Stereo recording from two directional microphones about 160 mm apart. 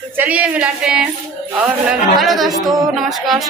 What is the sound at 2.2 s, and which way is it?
Music, centre (ahead or behind).